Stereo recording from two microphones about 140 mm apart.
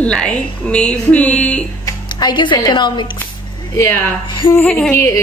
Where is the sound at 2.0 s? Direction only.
30° left (ahead or behind).